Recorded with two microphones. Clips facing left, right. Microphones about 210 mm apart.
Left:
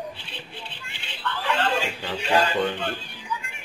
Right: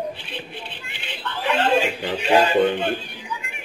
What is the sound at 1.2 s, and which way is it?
A man's voice, 20° right (ahead or behind).